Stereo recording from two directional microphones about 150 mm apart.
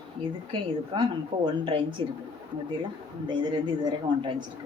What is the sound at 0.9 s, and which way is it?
Speech, 35° right (ahead or behind).